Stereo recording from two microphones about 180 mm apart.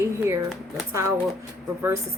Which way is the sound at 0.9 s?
15° right (ahead or behind).